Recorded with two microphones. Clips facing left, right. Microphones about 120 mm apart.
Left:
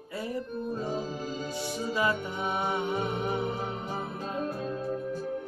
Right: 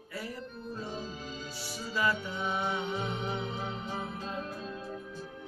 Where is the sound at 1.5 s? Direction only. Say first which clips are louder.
Left 5 dB; 20° left (ahead or behind).